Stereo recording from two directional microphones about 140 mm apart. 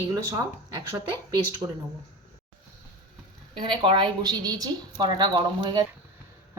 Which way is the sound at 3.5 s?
35° right (ahead or behind).